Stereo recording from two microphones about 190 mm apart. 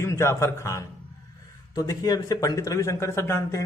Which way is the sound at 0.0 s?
15° left (ahead or behind).